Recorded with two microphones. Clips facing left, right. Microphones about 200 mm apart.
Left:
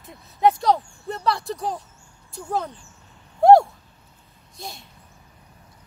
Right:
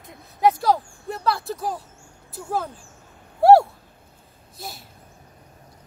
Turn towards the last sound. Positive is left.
turn(degrees=-5)  # may be behind; listen again after turning